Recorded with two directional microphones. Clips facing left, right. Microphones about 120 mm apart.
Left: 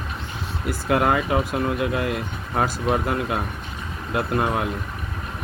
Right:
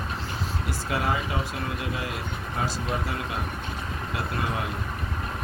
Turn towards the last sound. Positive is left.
turn(degrees=55)  # may be behind; listen again after turning